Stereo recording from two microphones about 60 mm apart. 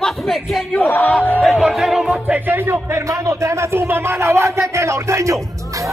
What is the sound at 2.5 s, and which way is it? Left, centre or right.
Speech, right.